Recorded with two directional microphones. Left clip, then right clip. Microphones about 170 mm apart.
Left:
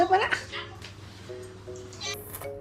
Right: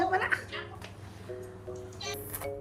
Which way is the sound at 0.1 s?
20° left (ahead or behind).